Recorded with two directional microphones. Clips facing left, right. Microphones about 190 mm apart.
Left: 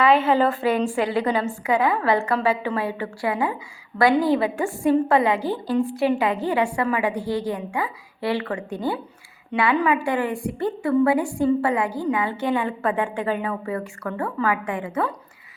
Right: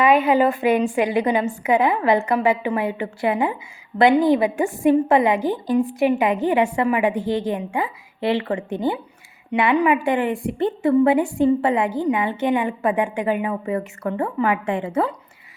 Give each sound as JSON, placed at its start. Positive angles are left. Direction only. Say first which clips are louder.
{"t": 0.0, "sound": "a woman's voice", "louder": "right 2 dB", "side_deg": -15}